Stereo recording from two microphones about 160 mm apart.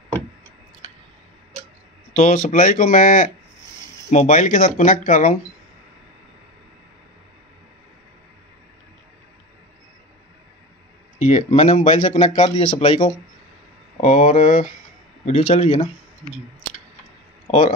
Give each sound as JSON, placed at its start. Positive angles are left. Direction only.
{"t": 2.1, "sound": "speech", "side_deg": 50}
{"t": 11.1, "sound": "speech", "side_deg": 50}
{"t": 12.4, "sound": "speech", "side_deg": 35}
{"t": 14.0, "sound": "speech", "side_deg": 50}